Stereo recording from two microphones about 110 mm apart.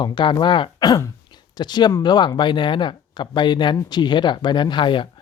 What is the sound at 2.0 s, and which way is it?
Speech, 40° left (ahead or behind).